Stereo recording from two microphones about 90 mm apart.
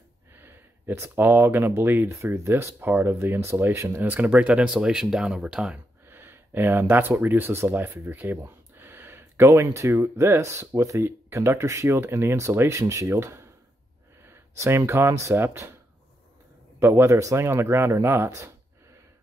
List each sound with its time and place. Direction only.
0.3 s speech: 25° right (ahead or behind)
4.0 s speech: 20° right (ahead or behind)
6.0 s speech: 25° right (ahead or behind)
16.8 s speech: 30° right (ahead or behind)